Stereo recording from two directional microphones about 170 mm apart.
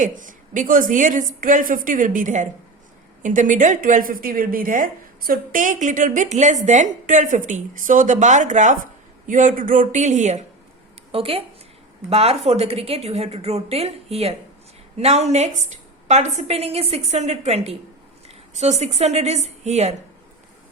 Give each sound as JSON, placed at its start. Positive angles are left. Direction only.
{"t": 0.0, "sound": "a woman's voice", "side_deg": -50}
{"t": 11.1, "sound": "a woman's voice", "side_deg": -35}